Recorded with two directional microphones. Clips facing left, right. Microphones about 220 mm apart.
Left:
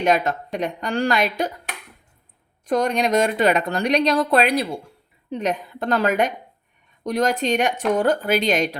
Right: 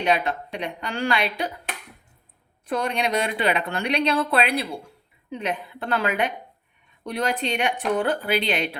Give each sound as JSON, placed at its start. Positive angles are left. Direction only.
{"t": 0.0, "sound": "speech", "side_deg": 45}
{"t": 2.6, "sound": "a woman's voice", "side_deg": 40}